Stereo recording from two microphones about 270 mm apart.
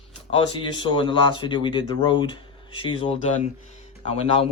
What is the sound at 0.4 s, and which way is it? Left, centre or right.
Speech, centre.